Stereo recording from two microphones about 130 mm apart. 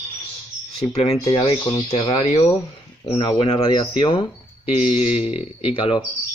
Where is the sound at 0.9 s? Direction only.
55° left (ahead or behind).